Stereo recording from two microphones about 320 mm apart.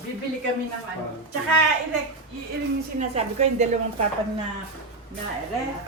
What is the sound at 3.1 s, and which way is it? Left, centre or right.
Speech, right.